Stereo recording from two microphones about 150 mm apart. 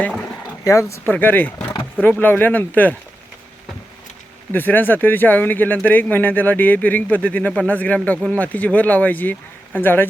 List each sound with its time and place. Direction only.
0.6 s speech: 20° left (ahead or behind)
4.5 s speech: 15° left (ahead or behind)